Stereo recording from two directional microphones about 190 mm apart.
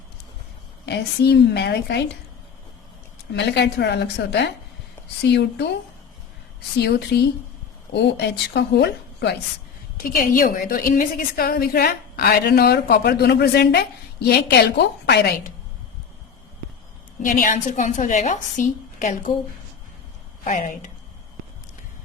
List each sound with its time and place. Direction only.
0.9 s speech: 60° left (ahead or behind)
3.3 s speech: 65° left (ahead or behind)
6.7 s speech: 60° left (ahead or behind)
10.0 s a woman's voice: 50° left (ahead or behind)
17.2 s a woman's voice: 45° left (ahead or behind)
20.4 s a woman's voice: 40° left (ahead or behind)